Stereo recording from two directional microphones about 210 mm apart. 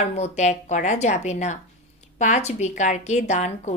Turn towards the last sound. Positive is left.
turn(degrees=35)  # may be behind; listen again after turning